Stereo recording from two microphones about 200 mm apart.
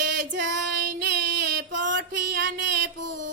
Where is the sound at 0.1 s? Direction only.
60° right (ahead or behind).